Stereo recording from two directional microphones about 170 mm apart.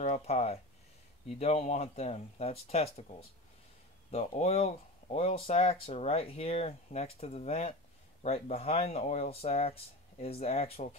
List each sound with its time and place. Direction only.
0.0 s speech: 40° left (ahead or behind)